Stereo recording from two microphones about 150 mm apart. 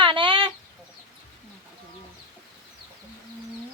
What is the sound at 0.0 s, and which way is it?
Chicken, 35° right (ahead or behind).